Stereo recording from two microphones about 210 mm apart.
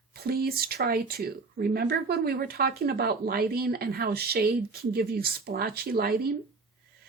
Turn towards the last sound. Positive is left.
turn(degrees=-45)  # may be behind; listen again after turning